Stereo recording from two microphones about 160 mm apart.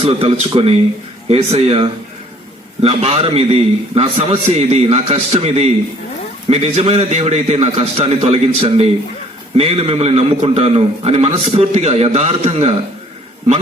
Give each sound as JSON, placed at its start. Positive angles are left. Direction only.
{"t": 0.0, "sound": "a man's voice", "side_deg": -35}